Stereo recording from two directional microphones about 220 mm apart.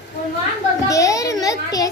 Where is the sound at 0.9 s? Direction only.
15° left (ahead or behind).